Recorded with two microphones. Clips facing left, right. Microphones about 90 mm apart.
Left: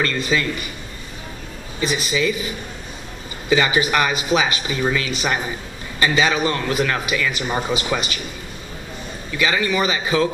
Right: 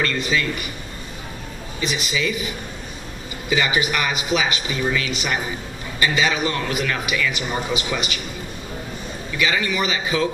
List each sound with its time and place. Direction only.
0.0 s a man's voice: 30° left (ahead or behind)
1.8 s a man's voice: 35° left (ahead or behind)
3.4 s a man's voice: 30° left (ahead or behind)
9.4 s a man's voice: 35° left (ahead or behind)